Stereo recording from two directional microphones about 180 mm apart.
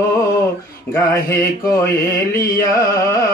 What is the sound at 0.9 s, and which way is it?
Mantra, 15° left (ahead or behind).